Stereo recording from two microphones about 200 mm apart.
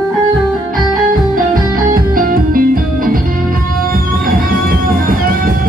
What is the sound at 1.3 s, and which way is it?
Music, 45° right (ahead or behind).